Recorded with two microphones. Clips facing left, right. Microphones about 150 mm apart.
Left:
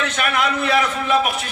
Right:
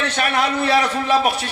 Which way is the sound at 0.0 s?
30° right (ahead or behind).